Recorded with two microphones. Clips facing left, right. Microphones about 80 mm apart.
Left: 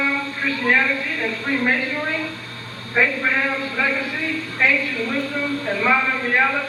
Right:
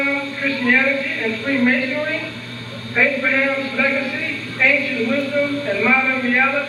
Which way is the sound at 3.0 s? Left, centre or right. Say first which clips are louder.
Right 2 dB; left.